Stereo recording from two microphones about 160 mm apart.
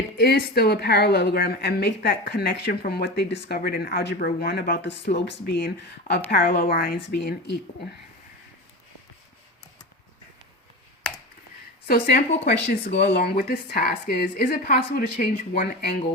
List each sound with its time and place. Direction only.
0.2 s a woman's voice: 85° left
11.9 s speech: 75° left (ahead or behind)
12.6 s speech: 90° left